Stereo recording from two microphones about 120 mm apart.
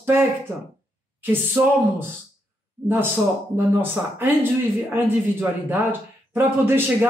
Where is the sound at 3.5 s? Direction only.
20° right (ahead or behind).